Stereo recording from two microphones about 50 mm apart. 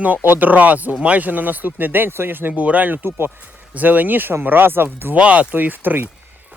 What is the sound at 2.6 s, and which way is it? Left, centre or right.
Speech, right.